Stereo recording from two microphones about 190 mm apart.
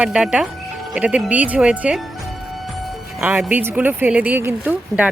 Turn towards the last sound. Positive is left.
turn(degrees=-10)  # may be behind; listen again after turning